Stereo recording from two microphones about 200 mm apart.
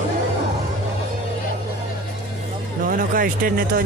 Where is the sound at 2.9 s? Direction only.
45° right (ahead or behind).